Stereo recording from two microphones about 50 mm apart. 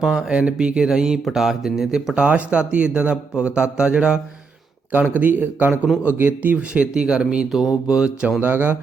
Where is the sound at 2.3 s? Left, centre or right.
Right.